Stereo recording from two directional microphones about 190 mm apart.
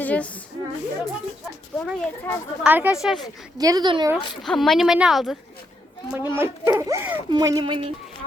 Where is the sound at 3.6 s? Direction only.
20° right (ahead or behind).